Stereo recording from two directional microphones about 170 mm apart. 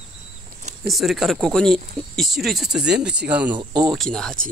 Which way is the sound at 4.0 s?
Centre (ahead or behind).